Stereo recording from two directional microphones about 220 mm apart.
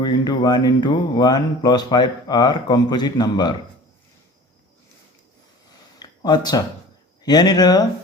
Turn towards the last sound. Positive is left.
turn(degrees=20)  # may be behind; listen again after turning